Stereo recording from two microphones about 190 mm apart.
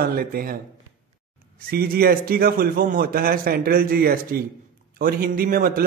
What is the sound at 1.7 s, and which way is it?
A man's voice, 55° right (ahead or behind).